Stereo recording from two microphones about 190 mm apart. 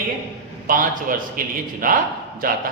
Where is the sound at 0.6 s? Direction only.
45° right (ahead or behind).